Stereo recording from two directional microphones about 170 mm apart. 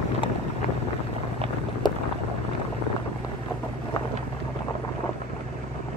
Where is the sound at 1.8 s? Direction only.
25° left (ahead or behind).